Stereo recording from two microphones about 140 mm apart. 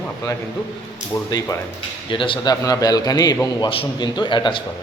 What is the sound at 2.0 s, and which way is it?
Speech, 35° left (ahead or behind).